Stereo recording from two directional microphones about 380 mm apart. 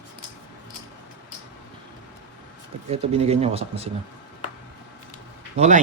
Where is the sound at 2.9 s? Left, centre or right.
Centre.